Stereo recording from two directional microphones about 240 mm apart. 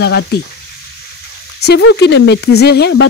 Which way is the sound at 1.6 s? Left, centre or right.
Left.